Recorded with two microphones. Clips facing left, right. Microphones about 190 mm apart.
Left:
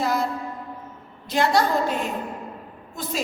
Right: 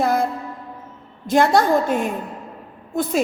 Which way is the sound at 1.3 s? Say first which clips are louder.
Right 5 dB; 50° right (ahead or behind).